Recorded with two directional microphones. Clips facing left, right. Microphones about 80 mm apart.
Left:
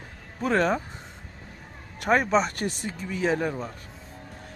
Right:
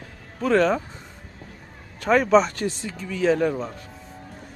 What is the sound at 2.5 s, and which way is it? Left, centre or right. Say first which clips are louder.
Speech: right 3 dB; left.